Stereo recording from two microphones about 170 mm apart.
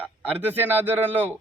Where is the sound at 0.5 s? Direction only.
10° right (ahead or behind).